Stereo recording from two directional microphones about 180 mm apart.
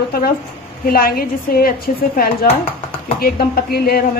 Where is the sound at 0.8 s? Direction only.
55° left (ahead or behind).